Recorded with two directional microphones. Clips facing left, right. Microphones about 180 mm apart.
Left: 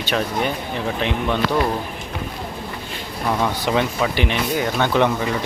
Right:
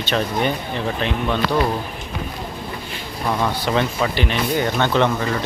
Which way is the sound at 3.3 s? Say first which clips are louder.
Even; 10° left (ahead or behind).